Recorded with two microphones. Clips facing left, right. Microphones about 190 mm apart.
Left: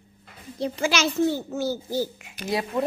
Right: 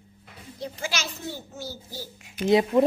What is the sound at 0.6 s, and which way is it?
Speech, 90° left.